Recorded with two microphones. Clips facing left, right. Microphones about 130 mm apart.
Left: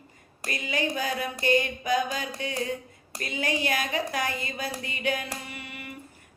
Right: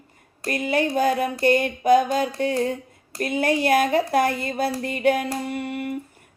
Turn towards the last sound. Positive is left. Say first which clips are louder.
# right 14 dB
turn(degrees=-50)  # may be behind; listen again after turning